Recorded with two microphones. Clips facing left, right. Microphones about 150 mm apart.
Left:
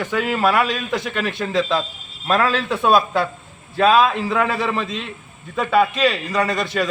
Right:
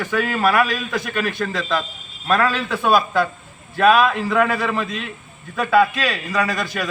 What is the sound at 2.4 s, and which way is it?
Speech, 25° left (ahead or behind).